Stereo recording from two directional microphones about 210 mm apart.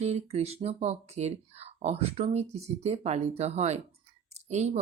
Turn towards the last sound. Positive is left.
turn(degrees=-35)  # may be behind; listen again after turning